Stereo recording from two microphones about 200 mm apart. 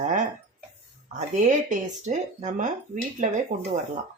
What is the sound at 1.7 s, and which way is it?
Speech, 35° right (ahead or behind).